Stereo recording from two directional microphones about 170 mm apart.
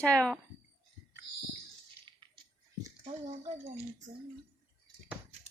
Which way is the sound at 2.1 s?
25° right (ahead or behind).